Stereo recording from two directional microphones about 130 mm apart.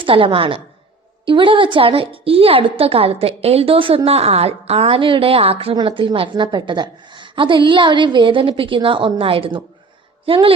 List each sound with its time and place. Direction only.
0.0 s a woman's voice: 45° right (ahead or behind)